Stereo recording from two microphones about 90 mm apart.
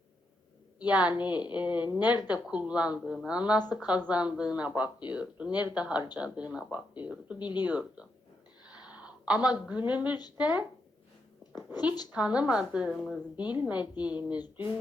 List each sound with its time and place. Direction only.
0.8 s speech: 15° right (ahead or behind)
8.6 s a sound: 15° right (ahead or behind)
9.6 s speech: 15° right (ahead or behind)
12.1 s speech: 15° right (ahead or behind)
13.3 s speech: 15° right (ahead or behind)
14.3 s a sound: 50° left (ahead or behind)